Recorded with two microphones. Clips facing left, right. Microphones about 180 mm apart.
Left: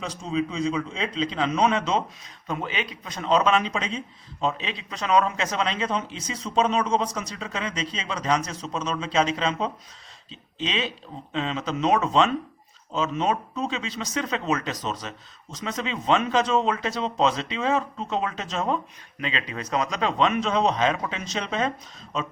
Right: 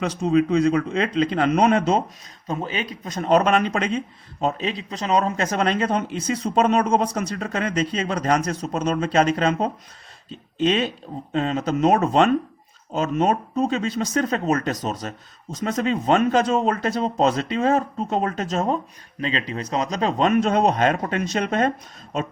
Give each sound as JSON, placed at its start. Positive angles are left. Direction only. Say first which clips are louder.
{"t": 0.0, "sound": "speech", "louder": "right 8 dB", "side_deg": -65}
{"t": 2.5, "sound": "speech", "louder": "right 3 dB", "side_deg": -40}